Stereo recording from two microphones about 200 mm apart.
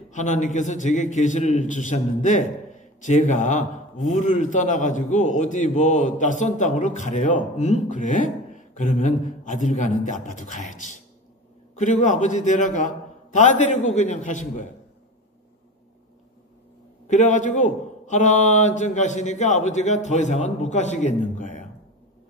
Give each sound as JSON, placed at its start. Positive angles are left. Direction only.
{"t": 0.1, "sound": "a man's voice", "side_deg": 35}
{"t": 17.1, "sound": "a man's voice", "side_deg": 35}